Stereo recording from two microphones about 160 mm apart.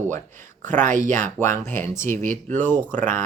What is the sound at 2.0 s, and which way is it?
Speech, 15° left (ahead or behind).